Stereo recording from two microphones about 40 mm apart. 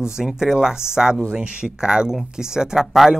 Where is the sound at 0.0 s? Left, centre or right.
Centre.